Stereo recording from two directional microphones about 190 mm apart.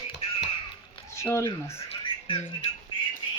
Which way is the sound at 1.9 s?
25° left (ahead or behind).